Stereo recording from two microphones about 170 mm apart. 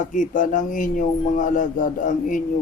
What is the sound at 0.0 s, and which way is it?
A man's voice, 50° left (ahead or behind).